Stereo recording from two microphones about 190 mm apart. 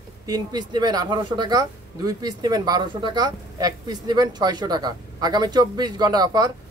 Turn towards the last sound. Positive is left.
turn(degrees=-20)  # may be behind; listen again after turning